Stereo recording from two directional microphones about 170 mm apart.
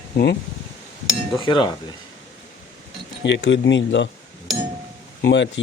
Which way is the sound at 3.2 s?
90° left.